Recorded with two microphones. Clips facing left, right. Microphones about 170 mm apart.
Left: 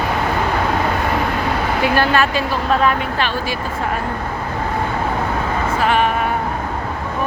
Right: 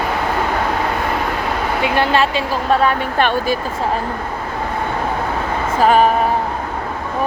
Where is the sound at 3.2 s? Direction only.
50° right (ahead or behind).